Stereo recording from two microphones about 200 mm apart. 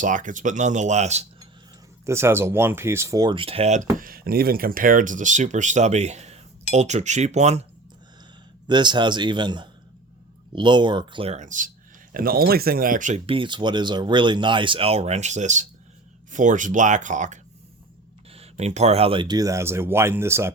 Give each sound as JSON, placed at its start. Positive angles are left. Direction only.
{"t": 0.0, "sound": "speech", "side_deg": -40}
{"t": 2.0, "sound": "speech", "side_deg": -15}
{"t": 8.6, "sound": "speech", "side_deg": -20}